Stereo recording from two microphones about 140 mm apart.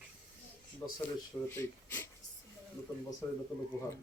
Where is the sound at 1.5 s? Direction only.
15° left (ahead or behind).